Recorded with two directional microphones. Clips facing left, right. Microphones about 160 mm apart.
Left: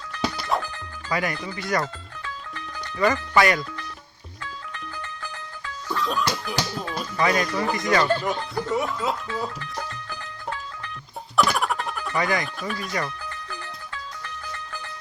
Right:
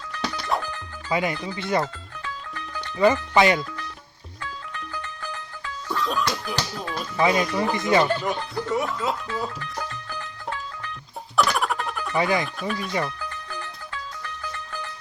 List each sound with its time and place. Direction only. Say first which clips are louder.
0.2 s music: left 1 dB; 5° left (ahead or behind)
1.1 s speech: right 2 dB; 25° right (ahead or behind)
3.0 s speech: right 2 dB; 25° right (ahead or behind)
5.9 s music: even; centre (ahead or behind)
7.2 s speech: right 2 dB; 25° right (ahead or behind)
8.2 s speech: even; centre (ahead or behind)
11.3 s music: even; centre (ahead or behind)
12.1 s speech: right 2 dB; 25° right (ahead or behind)
12.5 s speech: right 2 dB; centre (ahead or behind)